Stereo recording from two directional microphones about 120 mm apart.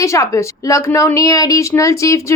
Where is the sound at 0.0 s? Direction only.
25° left (ahead or behind).